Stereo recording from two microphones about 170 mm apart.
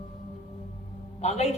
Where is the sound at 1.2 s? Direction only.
40° left (ahead or behind).